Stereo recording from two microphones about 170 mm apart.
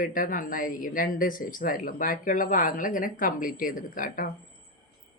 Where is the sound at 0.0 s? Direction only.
55° left (ahead or behind).